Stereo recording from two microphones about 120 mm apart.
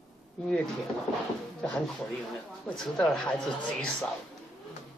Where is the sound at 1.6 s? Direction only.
5° left (ahead or behind).